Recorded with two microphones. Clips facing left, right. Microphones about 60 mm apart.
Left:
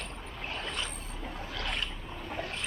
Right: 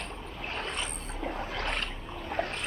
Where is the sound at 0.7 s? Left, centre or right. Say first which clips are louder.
Right 1 dB; centre.